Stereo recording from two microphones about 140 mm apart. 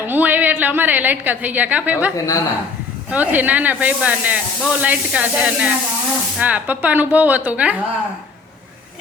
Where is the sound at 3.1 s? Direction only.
10° right (ahead or behind).